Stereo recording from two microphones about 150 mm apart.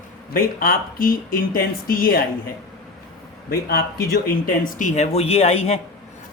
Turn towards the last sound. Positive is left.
turn(degrees=45)  # may be behind; listen again after turning